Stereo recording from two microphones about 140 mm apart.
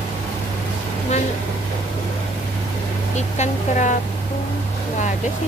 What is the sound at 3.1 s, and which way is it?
Speech, 60° left (ahead or behind).